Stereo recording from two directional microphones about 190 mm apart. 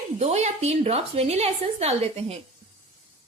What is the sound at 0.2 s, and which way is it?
A woman's voice, 35° right (ahead or behind).